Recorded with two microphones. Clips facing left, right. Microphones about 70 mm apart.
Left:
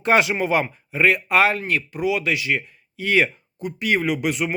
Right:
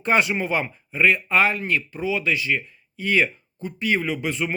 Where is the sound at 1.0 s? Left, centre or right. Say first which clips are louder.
Left 2 dB; left.